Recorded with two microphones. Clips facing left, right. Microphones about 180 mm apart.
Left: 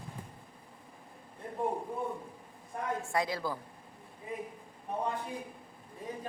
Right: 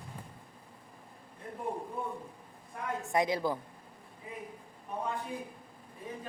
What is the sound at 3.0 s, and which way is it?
Speech, 20° right (ahead or behind).